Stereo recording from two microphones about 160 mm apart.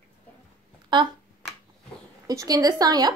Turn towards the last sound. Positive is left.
turn(degrees=-25)  # may be behind; listen again after turning